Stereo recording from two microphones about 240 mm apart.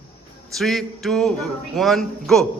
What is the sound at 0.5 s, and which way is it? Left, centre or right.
Speech, centre.